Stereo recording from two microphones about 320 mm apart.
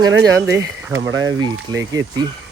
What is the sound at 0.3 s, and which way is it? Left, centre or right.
Speech, centre.